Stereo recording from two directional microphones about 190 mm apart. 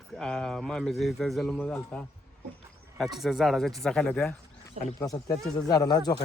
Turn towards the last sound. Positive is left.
turn(degrees=20)  # may be behind; listen again after turning